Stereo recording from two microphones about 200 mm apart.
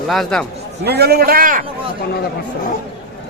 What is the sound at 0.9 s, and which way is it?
Speech, 55° right (ahead or behind).